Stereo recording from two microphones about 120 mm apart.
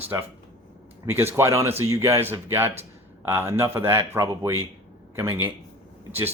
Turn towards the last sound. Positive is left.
turn(degrees=-15)  # may be behind; listen again after turning